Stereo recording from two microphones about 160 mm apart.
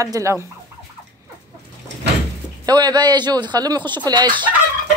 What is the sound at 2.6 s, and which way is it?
Speech, 25° right (ahead or behind).